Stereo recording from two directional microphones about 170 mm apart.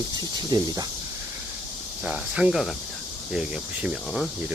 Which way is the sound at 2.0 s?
5° right (ahead or behind).